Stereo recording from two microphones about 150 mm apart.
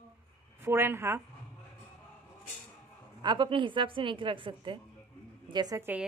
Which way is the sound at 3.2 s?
30° right (ahead or behind).